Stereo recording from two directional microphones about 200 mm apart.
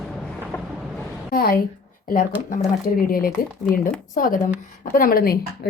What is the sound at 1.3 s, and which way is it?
Speech, 50° left (ahead or behind).